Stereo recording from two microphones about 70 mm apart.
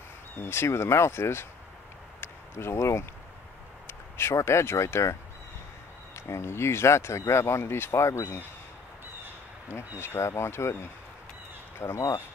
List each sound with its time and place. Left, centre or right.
0.4 s speech: left
2.1 s a sound: left
3.8 s speech: left
6.1 s speech: left
9.7 s speech: left